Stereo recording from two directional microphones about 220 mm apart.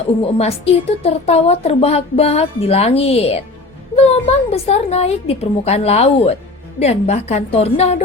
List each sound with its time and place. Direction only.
0.2 s a woman's voice: 25° left (ahead or behind)